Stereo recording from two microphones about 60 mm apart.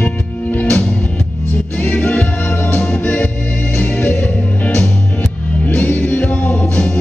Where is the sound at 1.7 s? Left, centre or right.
Left.